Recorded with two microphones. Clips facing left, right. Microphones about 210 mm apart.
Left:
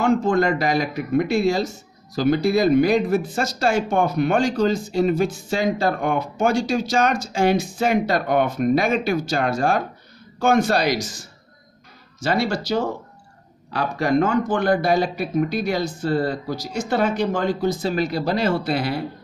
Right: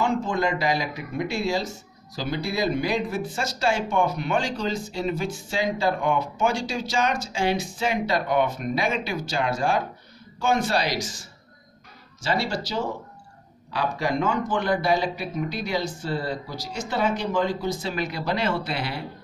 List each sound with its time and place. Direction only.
0.0 s speech: 55° left (ahead or behind)
12.2 s speech: 50° left (ahead or behind)